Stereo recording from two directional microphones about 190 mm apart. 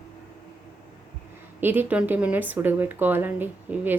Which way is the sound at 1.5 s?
10° right (ahead or behind).